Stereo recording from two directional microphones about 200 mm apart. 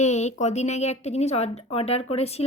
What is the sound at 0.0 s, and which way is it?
A woman's voice, 35° left (ahead or behind).